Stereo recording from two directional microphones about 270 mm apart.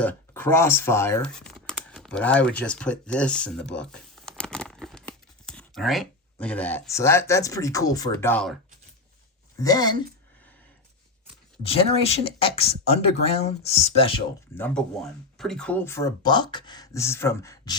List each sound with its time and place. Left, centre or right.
0.0 s speech: centre
9.6 s speech: centre
11.6 s speech: left
14.5 s speech: centre